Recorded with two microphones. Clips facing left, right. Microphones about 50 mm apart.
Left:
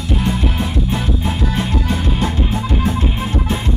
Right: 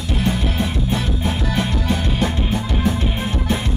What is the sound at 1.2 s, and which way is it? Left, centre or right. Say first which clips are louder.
Music: left 1 dB; right.